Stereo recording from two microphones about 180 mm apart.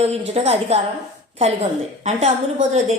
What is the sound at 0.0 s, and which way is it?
Speech, 35° right (ahead or behind).